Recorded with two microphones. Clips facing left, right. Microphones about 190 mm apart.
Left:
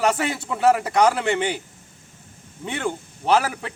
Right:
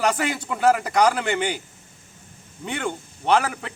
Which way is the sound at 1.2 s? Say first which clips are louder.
Left 2 dB; 30° left (ahead or behind).